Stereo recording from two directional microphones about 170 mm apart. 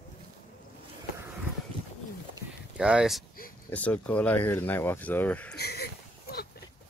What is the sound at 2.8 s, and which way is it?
Speech, 5° right (ahead or behind).